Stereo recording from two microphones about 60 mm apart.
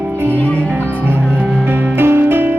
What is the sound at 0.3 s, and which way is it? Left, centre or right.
Music, left.